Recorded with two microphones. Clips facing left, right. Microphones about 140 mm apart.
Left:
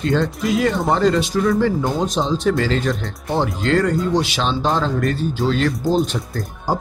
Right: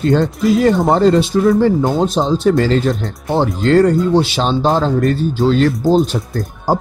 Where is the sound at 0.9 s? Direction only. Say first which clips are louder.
Right 5 dB; 30° right (ahead or behind).